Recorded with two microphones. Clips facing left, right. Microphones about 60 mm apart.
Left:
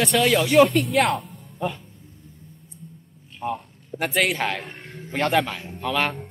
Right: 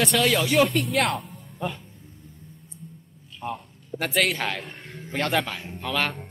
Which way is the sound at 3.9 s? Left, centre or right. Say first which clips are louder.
Left 2 dB; centre.